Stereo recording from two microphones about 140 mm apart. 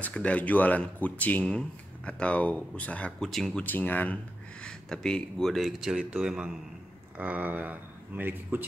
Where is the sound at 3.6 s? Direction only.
10° left (ahead or behind).